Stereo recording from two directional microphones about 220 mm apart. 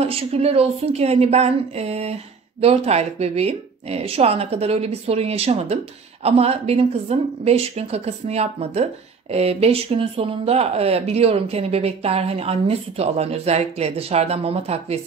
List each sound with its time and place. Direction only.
0.0 s speech: 25° right (ahead or behind)